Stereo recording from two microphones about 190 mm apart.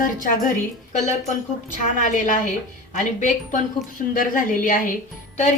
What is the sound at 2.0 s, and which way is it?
A woman's voice, 40° left (ahead or behind).